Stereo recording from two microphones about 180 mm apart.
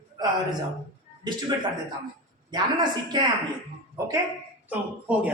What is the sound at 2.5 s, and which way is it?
Speech, 25° right (ahead or behind).